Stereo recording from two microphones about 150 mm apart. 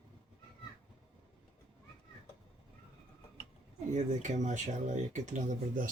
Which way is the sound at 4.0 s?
55° right (ahead or behind).